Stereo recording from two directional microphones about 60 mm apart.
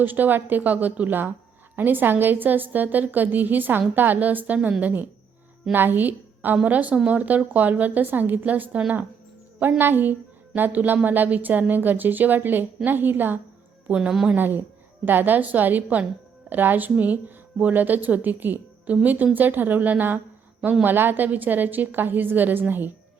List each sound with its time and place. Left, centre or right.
0.0 s a woman's voice: right